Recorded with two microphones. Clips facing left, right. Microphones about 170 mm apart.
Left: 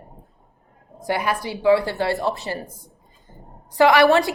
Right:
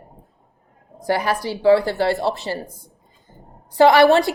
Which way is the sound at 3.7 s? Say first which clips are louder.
Right 2 dB; 35° right (ahead or behind).